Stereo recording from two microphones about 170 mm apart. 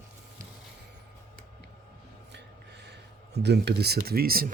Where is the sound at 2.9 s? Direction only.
80° right; by 4.5 s 60° right (ahead or behind).